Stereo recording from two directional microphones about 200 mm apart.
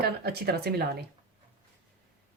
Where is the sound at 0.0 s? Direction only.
50° right (ahead or behind).